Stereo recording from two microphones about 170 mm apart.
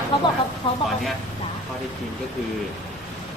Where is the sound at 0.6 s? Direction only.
30° left (ahead or behind).